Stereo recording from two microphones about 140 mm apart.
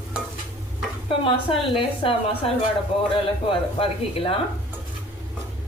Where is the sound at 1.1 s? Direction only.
40° left (ahead or behind).